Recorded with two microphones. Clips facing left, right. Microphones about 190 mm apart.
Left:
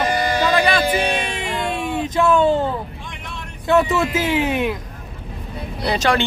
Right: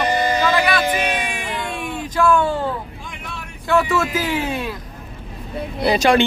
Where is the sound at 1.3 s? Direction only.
25° left (ahead or behind).